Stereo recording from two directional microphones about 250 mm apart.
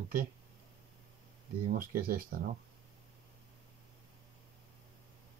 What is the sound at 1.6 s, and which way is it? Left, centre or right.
Speech, right.